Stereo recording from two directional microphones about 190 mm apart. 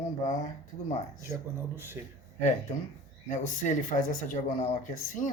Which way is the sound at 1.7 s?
10° right (ahead or behind).